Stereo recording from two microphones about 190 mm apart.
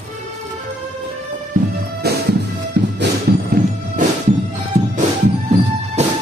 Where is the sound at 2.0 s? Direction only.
60° right (ahead or behind).